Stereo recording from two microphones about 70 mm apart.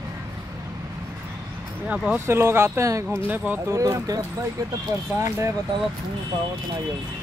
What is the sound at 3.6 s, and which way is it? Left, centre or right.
Speech, right.